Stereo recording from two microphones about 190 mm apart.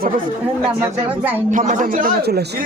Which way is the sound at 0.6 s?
10° right (ahead or behind).